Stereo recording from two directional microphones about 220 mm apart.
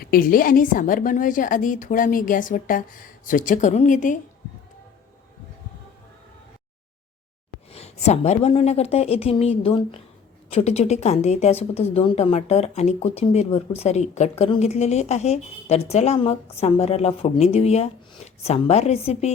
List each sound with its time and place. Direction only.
0.0 s a woman's voice: 40° left (ahead or behind)
7.7 s a woman's voice: 30° left (ahead or behind)